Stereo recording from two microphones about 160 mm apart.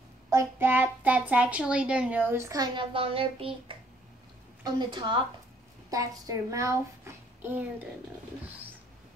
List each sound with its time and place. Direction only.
0.3 s a child's voice: 15° right (ahead or behind)